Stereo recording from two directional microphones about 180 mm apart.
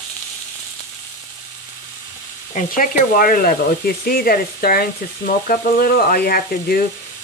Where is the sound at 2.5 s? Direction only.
50° left (ahead or behind).